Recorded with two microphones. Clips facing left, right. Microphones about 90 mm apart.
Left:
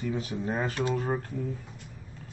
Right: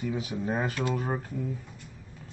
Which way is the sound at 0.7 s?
25° left (ahead or behind).